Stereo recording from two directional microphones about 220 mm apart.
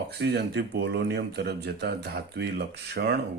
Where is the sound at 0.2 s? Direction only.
50° right (ahead or behind).